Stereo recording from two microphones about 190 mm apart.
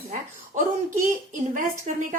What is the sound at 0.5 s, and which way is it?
A woman's voice, 40° right (ahead or behind).